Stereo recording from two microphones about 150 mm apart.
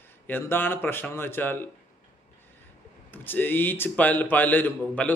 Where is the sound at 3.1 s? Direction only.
15° left (ahead or behind).